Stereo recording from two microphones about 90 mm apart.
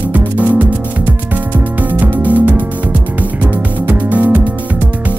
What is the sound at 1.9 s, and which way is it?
Music, 20° right (ahead or behind).